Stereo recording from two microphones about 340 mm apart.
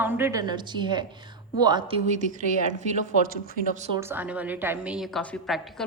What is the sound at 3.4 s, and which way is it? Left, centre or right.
Speech, right.